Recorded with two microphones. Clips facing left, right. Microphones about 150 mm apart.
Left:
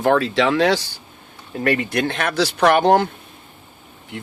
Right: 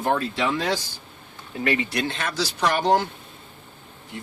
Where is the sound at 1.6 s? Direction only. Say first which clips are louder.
Left 5 dB; 50° left (ahead or behind).